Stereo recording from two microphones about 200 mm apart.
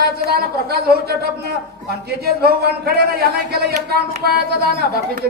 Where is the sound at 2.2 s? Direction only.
50° right (ahead or behind).